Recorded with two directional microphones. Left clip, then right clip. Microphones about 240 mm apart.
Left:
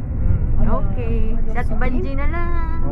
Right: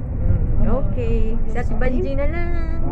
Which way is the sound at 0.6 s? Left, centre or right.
Centre.